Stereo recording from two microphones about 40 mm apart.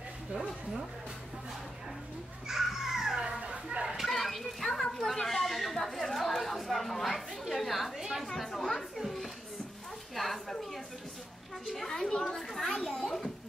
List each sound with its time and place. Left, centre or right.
2.4 s children playing: centre
4.0 s children playing: centre
4.9 s chatter: centre
8.4 s children playing: centre
10.1 s a sound: centre
11.6 s a woman's voice: centre
11.9 s children playing: centre